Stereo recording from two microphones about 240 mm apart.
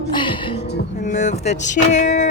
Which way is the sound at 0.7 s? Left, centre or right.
Left.